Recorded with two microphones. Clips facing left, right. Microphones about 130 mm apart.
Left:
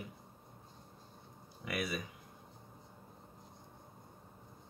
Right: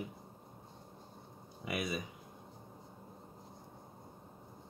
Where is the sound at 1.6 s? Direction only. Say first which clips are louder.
Right 1 dB; 20° right (ahead or behind).